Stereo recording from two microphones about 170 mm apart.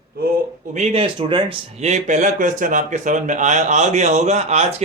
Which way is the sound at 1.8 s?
45° right (ahead or behind).